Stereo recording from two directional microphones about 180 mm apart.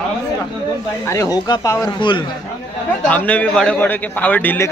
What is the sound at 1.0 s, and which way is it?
Speech, 20° left (ahead or behind).